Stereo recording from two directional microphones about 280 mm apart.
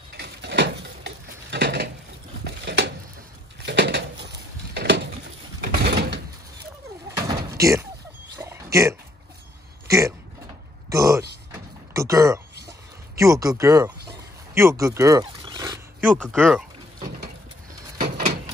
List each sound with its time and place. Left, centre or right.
0.2 s a sound: right
7.2 s door: centre
8.4 s a sound: centre
13.2 s speech: centre
14.5 s roaring cats: centre
16.2 s speech: centre